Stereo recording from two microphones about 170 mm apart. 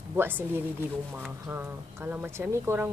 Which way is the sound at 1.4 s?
15° right (ahead or behind).